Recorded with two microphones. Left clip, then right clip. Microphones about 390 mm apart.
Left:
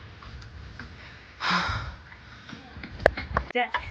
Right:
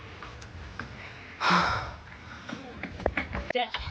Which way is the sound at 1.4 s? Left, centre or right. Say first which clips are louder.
Right 2 dB; centre.